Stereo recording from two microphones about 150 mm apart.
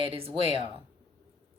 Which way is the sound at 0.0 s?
40° right (ahead or behind).